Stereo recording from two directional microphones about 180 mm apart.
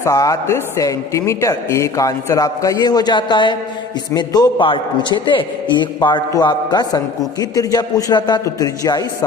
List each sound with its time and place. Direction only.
0.0 s speech: 20° left (ahead or behind)